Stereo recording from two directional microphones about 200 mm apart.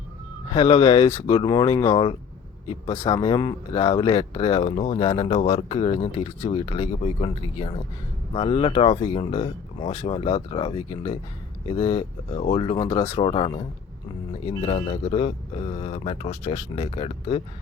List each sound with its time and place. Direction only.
0.5 s speech: 25° left (ahead or behind)